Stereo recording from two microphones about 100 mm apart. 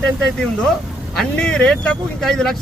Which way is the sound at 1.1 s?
5° left (ahead or behind).